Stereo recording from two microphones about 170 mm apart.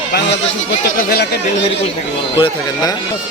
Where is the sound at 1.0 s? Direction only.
65° left (ahead or behind).